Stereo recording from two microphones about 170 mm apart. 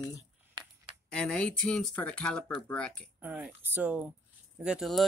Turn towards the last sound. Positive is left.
turn(degrees=0)  # may be behind; listen again after turning